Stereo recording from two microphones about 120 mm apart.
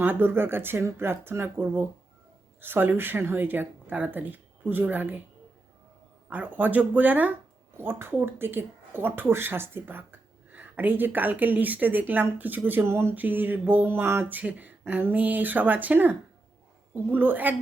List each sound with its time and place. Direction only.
0.0 s speech: 15° right (ahead or behind)
6.3 s speech: 15° right (ahead or behind)